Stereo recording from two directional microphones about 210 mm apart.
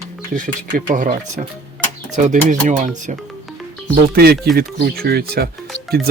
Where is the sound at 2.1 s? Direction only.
35° right (ahead or behind).